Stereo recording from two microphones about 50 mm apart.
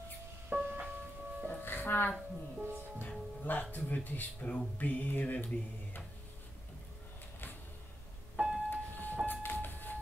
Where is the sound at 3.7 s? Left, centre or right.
Left.